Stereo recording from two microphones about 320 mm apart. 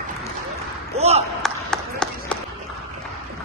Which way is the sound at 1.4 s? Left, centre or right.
Centre.